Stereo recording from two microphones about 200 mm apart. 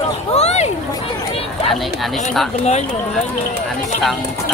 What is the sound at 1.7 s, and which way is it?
Speech, centre (ahead or behind).